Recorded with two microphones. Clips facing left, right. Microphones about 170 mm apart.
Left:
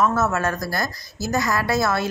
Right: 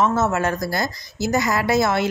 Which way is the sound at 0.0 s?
20° right (ahead or behind).